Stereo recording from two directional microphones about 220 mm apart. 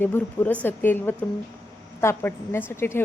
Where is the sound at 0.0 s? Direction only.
10° left (ahead or behind).